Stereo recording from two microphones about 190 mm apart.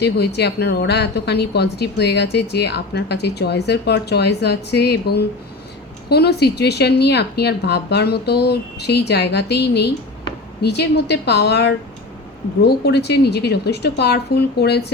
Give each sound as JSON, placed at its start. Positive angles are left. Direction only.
{"t": 0.0, "sound": "a woman's voice", "side_deg": 60}